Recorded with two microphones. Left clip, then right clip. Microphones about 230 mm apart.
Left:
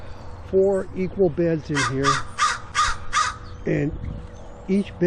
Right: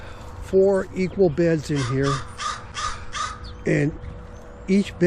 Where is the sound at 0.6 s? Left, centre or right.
Left.